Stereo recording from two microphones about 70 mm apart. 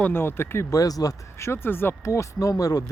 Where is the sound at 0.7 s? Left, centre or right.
Left.